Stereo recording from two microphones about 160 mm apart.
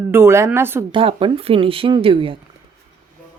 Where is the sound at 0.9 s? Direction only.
30° right (ahead or behind).